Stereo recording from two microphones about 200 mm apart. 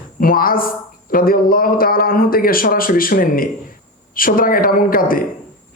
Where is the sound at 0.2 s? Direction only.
45° left (ahead or behind).